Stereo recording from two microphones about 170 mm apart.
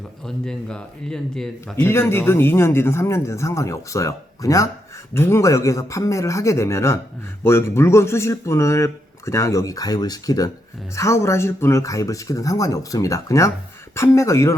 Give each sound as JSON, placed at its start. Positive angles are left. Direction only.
{"t": 0.3, "sound": "speech", "side_deg": 5}
{"t": 1.7, "sound": "speech", "side_deg": 15}